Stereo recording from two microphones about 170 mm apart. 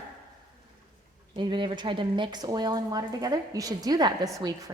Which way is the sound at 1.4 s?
25° right (ahead or behind).